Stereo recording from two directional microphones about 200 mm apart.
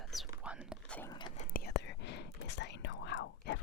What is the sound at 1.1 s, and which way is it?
Speech, 25° left (ahead or behind).